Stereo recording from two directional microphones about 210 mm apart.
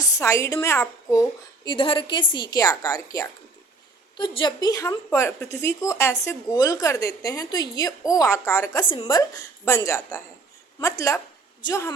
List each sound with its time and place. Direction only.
0.0 s a woman's voice: 15° left (ahead or behind)